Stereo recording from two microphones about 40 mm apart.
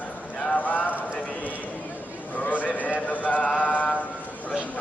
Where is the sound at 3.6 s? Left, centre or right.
Left.